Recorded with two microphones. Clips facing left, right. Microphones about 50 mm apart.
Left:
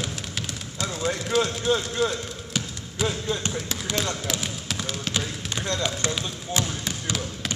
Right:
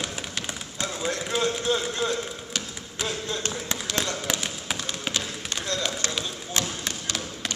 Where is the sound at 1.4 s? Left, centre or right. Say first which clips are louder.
Left 2 dB; centre.